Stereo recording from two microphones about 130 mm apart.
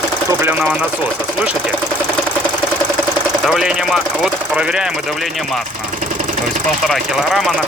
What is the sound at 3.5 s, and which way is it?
Speech, 5° right (ahead or behind).